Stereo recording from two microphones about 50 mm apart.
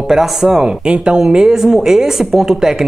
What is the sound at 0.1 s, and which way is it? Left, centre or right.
Speech, centre.